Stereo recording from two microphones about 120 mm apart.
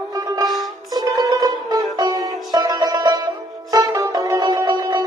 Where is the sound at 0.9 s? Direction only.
35° right (ahead or behind).